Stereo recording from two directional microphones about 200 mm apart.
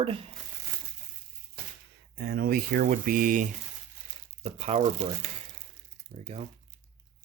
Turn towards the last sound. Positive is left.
turn(degrees=-30)  # may be behind; listen again after turning